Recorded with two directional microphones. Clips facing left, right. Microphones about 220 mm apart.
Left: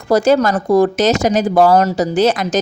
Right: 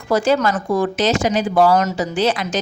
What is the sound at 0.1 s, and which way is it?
Speech, 40° left (ahead or behind).